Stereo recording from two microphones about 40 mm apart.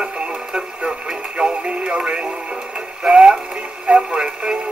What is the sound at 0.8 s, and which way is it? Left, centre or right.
Music, centre.